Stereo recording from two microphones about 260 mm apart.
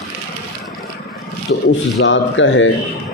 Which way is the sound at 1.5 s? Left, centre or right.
Left.